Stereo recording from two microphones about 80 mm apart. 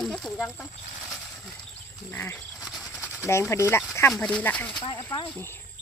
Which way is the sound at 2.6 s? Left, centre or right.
Centre.